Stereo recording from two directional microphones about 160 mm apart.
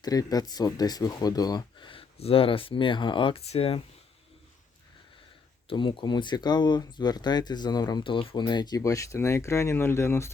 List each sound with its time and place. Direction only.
0.0 s speech: 25° left (ahead or behind)
5.6 s speech: 30° left (ahead or behind)